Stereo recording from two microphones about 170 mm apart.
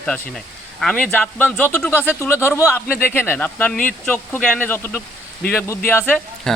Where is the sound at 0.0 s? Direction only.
5° left (ahead or behind).